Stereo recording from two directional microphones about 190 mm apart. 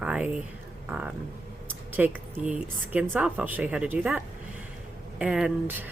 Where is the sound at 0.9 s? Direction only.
5° right (ahead or behind).